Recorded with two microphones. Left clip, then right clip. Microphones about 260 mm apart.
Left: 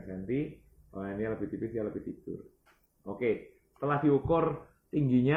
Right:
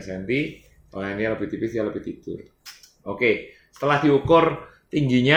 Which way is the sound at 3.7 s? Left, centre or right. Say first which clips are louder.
Right 9 dB; centre.